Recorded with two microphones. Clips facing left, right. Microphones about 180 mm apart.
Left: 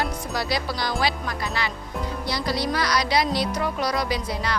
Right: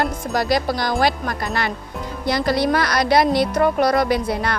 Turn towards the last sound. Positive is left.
turn(degrees=-55)  # may be behind; listen again after turning